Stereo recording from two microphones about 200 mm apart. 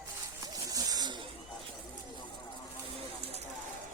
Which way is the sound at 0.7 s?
20° right (ahead or behind).